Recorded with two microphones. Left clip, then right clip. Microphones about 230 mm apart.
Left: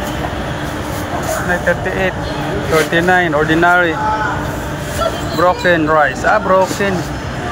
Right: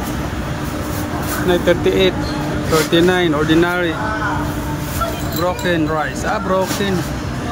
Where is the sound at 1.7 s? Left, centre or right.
Right.